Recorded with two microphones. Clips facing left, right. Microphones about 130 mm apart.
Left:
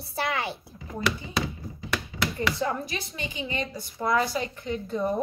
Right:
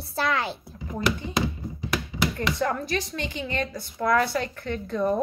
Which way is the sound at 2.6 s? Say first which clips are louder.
Right 3 dB; 15° left (ahead or behind).